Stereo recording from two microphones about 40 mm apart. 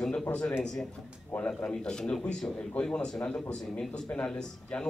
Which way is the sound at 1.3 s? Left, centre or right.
Left.